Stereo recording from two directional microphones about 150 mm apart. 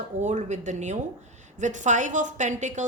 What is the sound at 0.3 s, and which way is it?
Speech, 50° right (ahead or behind).